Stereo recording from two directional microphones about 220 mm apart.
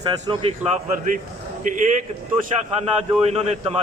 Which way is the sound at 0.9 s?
35° right (ahead or behind).